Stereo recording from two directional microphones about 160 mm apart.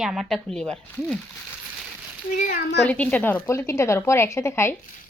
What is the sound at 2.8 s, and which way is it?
A woman's voice, 10° left (ahead or behind).